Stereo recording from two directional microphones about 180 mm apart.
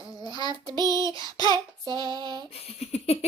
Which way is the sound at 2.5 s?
35° left (ahead or behind).